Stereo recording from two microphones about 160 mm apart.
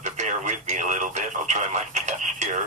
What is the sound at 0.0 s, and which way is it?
Radio, 50° right (ahead or behind).